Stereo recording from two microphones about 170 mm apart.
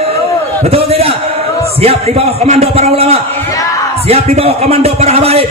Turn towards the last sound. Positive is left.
turn(degrees=-35)  # may be behind; listen again after turning